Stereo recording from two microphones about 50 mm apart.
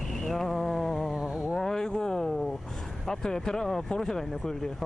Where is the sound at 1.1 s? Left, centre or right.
Centre.